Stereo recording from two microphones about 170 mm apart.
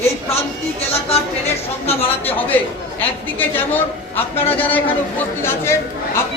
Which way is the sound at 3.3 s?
10° left (ahead or behind).